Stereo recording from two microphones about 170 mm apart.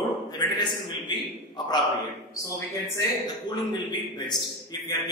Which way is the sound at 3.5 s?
25° left (ahead or behind).